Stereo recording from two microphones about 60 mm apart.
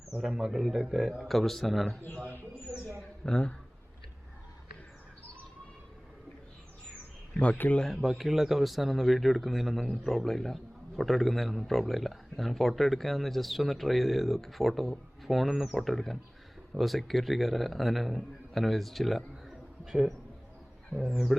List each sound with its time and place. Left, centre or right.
0.2 s a man's voice: centre
3.2 s speech: centre
7.6 s speech: left
8.0 s a man's voice: centre